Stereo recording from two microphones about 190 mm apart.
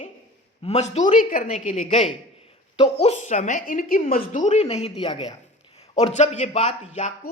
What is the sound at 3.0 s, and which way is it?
A woman's voice, 35° left (ahead or behind).